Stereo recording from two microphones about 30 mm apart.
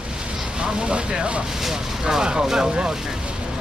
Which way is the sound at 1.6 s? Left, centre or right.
Centre.